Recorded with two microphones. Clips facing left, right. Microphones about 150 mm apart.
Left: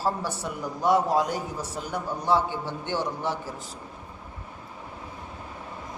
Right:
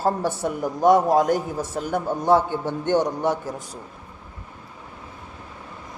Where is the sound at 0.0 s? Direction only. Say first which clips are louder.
Right 6 dB; 50° right (ahead or behind).